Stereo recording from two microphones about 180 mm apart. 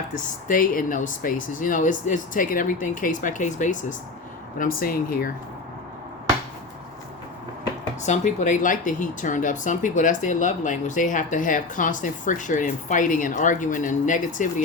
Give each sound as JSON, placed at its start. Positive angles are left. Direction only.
{"t": 0.1, "sound": "speech", "side_deg": 50}
{"t": 8.0, "sound": "speech", "side_deg": 40}